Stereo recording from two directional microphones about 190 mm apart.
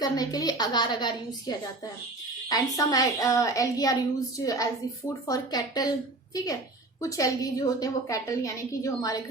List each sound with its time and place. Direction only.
0.0 s a woman's voice: 20° left (ahead or behind)